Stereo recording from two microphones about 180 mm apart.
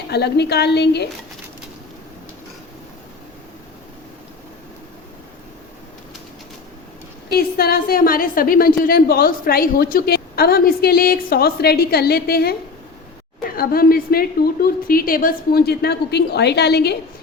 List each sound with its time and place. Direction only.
0.1 s a woman's voice: 65° left (ahead or behind)
7.3 s a woman's voice: 60° left (ahead or behind)
13.6 s a woman's voice: 55° left (ahead or behind)